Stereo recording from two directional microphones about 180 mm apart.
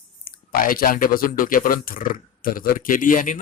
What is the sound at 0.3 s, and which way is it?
Speech, 50° left (ahead or behind).